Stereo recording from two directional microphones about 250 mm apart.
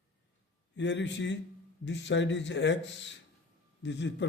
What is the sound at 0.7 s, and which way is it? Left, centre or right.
A man's voice, left.